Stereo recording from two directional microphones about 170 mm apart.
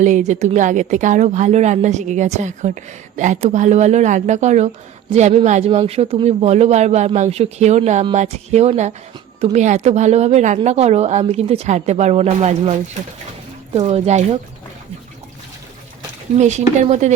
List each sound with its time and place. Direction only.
0.0 s a woman's voice: 45° right (ahead or behind)
13.7 s a woman's voice: 40° right (ahead or behind)
16.3 s a woman's voice: 40° right (ahead or behind)